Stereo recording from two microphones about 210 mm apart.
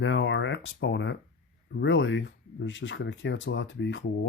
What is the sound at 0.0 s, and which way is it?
Speech, 60° left (ahead or behind).